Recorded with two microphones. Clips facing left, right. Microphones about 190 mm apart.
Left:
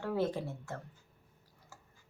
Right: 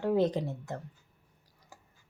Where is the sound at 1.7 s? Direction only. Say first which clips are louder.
Right 3 dB; 15° right (ahead or behind).